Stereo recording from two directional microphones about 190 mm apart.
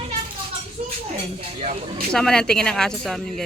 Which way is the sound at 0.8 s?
35° right (ahead or behind).